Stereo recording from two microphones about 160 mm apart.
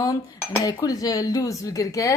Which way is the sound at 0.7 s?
20° left (ahead or behind).